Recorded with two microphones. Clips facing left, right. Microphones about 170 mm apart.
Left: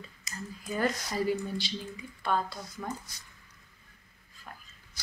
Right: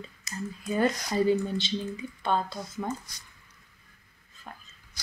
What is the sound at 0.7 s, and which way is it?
Speech, 25° right (ahead or behind).